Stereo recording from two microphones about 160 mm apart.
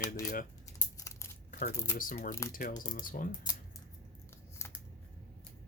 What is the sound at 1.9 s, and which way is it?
Speech, 60° left (ahead or behind).